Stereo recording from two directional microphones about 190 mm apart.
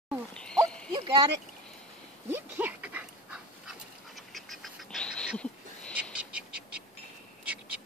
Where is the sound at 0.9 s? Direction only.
20° right (ahead or behind).